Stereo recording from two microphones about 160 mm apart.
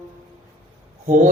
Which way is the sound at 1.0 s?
50° right (ahead or behind).